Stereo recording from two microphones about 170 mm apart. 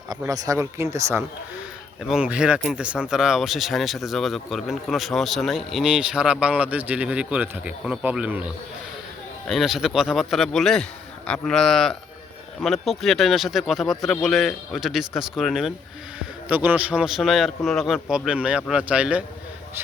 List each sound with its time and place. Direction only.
0.1 s speech: 20° right (ahead or behind)
2.0 s speech: 5° right (ahead or behind)